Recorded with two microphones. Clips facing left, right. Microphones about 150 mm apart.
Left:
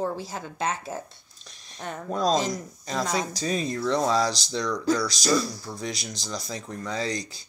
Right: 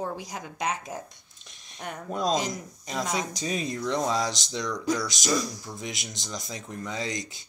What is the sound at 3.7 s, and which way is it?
Speech, 15° right (ahead or behind).